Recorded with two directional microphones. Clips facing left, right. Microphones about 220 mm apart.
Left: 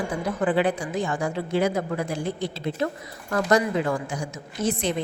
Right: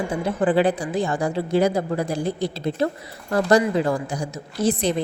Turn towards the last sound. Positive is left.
turn(degrees=-35)  # may be behind; listen again after turning